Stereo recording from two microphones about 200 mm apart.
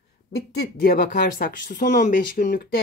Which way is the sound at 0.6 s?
50° left (ahead or behind).